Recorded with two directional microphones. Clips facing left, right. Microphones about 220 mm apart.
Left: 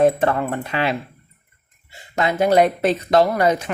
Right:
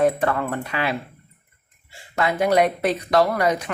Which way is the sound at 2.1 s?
25° left (ahead or behind).